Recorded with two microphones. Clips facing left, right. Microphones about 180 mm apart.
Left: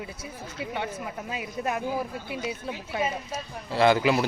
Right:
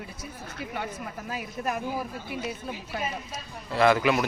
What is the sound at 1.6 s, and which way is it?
Speech, 20° left (ahead or behind).